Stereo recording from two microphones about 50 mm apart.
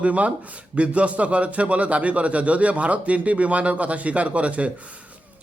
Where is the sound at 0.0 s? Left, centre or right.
Right.